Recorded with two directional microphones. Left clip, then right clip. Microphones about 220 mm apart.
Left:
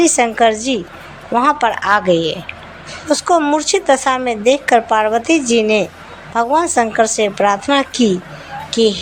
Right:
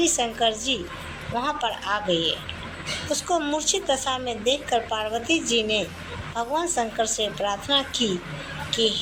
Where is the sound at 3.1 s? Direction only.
30° left (ahead or behind).